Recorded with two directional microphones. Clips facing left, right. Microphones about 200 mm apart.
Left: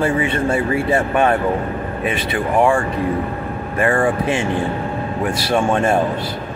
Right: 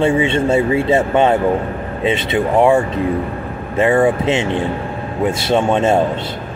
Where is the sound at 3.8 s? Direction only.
25° right (ahead or behind).